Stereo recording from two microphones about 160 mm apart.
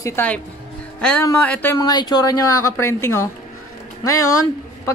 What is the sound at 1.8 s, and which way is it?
Speech, 25° left (ahead or behind).